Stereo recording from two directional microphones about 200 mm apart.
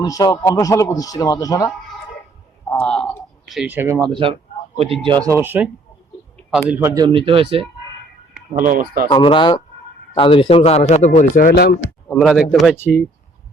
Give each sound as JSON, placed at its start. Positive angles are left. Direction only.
{"t": 0.0, "sound": "a man's voice", "side_deg": 20}
{"t": 2.6, "sound": "a sound", "side_deg": 5}
{"t": 4.1, "sound": "speech", "side_deg": -25}
{"t": 8.3, "sound": "speech", "side_deg": -45}
{"t": 9.0, "sound": "speech", "side_deg": 25}
{"t": 12.0, "sound": "a man's voice", "side_deg": 0}